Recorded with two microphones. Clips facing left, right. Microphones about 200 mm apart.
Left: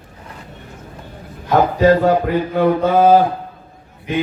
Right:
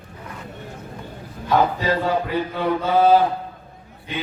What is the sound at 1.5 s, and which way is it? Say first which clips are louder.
Speech: left 7 dB; 45° left (ahead or behind).